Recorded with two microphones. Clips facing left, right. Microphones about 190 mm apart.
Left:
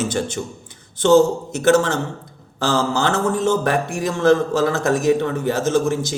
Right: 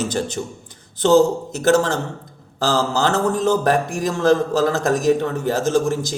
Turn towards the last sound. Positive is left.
turn(degrees=-40)  # may be behind; listen again after turning